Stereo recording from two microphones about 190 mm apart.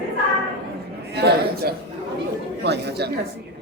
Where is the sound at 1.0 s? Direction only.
60° right (ahead or behind).